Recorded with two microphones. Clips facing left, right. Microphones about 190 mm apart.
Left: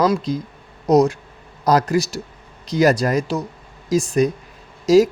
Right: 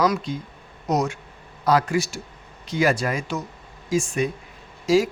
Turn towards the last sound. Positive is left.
turn(degrees=40)  # may be behind; listen again after turning